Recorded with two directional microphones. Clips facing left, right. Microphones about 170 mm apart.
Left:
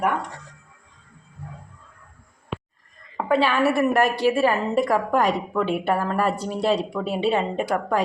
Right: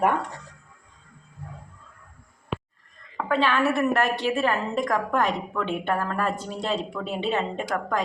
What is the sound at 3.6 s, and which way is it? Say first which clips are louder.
Speech: left 3 dB; 35° left (ahead or behind).